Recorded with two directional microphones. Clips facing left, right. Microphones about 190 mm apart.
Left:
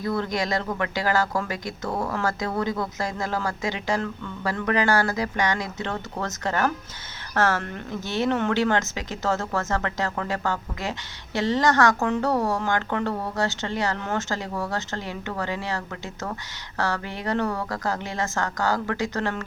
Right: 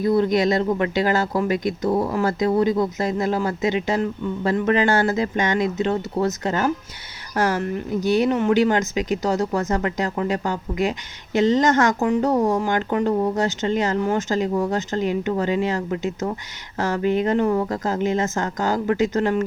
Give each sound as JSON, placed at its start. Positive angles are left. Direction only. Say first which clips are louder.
{"t": 0.0, "sound": "speech", "louder": "right 8 dB", "side_deg": -20}